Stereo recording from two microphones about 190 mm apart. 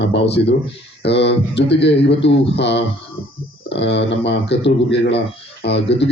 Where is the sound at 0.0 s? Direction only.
65° left (ahead or behind).